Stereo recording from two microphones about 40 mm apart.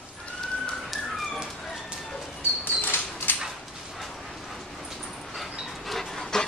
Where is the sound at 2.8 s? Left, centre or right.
Left.